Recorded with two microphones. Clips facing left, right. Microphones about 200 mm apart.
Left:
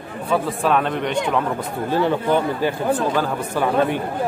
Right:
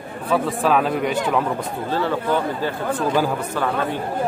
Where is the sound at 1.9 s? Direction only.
15° left (ahead or behind).